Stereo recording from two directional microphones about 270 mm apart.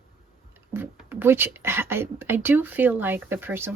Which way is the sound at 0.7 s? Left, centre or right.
Centre.